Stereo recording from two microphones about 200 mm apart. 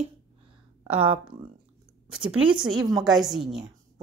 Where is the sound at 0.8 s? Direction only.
30° right (ahead or behind).